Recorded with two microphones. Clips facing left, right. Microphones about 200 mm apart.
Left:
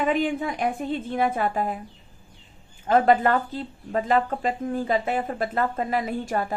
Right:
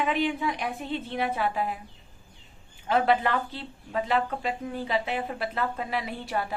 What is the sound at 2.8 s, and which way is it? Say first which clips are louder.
Speech: left 5 dB; 45° left (ahead or behind).